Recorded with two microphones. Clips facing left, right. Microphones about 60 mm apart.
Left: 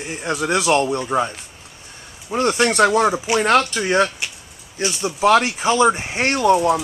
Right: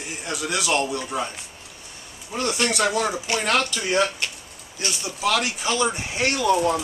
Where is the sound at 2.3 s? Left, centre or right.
Left.